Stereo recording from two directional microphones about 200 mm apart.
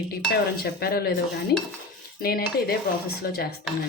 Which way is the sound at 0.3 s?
50° left (ahead or behind).